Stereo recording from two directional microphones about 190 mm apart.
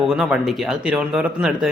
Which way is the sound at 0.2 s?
Centre (ahead or behind).